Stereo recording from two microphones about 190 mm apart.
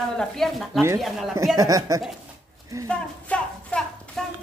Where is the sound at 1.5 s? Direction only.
20° right (ahead or behind).